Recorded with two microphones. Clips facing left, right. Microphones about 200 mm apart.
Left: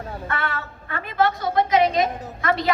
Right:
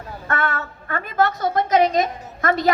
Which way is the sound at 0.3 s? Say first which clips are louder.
Right 6 dB; 45° right (ahead or behind).